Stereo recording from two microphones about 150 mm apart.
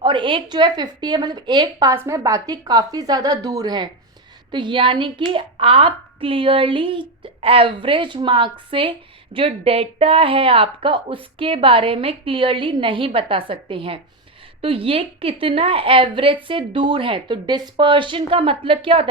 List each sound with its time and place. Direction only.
0.0 s a woman's voice: 35° right (ahead or behind)